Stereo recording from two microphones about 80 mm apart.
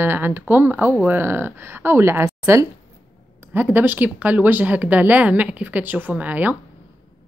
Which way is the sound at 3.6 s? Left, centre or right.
Right.